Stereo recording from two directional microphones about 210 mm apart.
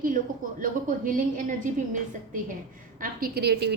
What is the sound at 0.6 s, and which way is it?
A woman's voice, 40° right (ahead or behind).